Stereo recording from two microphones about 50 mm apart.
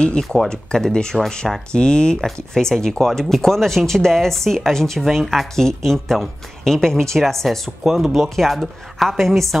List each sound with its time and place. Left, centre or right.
0.5 s speech: centre
2.2 s speech: centre
7.8 s a woman's voice: centre